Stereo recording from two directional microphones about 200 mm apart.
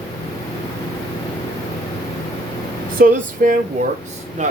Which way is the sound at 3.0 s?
45° right (ahead or behind).